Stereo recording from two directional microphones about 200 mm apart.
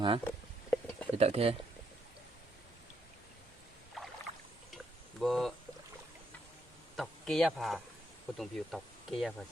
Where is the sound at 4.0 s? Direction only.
Centre (ahead or behind).